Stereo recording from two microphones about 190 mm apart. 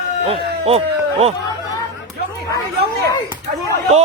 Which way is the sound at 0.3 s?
30° right (ahead or behind).